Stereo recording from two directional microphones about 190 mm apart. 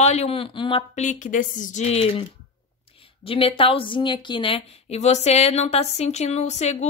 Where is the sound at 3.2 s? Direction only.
30° left (ahead or behind).